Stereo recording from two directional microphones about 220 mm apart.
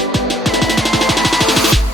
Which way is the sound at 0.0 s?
Centre (ahead or behind).